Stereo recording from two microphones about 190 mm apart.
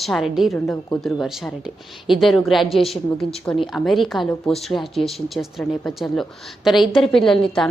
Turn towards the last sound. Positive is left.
turn(degrees=5)  # may be behind; listen again after turning